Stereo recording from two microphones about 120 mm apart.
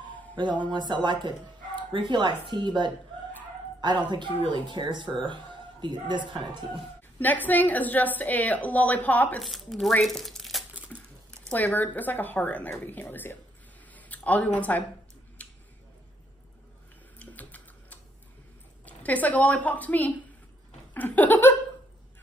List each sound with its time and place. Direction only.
0.4 s speech: 40° right (ahead or behind)
7.2 s a woman's voice: 15° left (ahead or behind)
9.4 s speech: centre (ahead or behind)
10.9 s a sound: 10° left (ahead or behind)
11.5 s a woman's voice: 15° left (ahead or behind)
13.9 s a sound: 15° left (ahead or behind)
15.4 s scissors: 10° left (ahead or behind)
17.2 s typing: 15° left (ahead or behind)
18.9 s a woman's voice: 15° left (ahead or behind)